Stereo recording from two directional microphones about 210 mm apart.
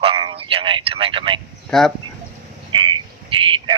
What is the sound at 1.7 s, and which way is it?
Speech, centre (ahead or behind).